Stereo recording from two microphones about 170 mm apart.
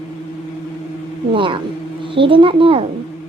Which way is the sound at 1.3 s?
30° right (ahead or behind).